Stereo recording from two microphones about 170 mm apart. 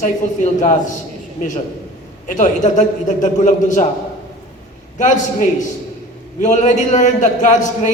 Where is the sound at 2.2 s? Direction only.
45° left (ahead or behind).